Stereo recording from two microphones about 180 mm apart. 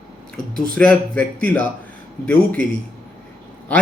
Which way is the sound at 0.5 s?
5° left (ahead or behind).